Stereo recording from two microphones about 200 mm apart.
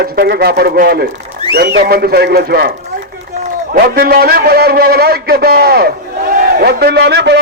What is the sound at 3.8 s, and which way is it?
A man's voice, 50° right (ahead or behind).